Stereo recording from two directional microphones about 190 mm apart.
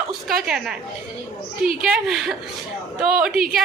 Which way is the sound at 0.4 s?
5° right (ahead or behind).